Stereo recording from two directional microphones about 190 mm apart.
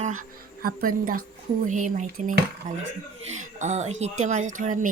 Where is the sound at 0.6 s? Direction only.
50° right (ahead or behind).